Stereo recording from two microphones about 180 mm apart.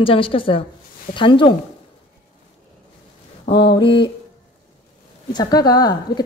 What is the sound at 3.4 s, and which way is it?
Mantra, 30° left (ahead or behind).